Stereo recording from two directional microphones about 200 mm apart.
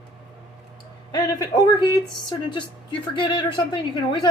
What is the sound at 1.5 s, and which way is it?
A woman's voice, 20° left (ahead or behind).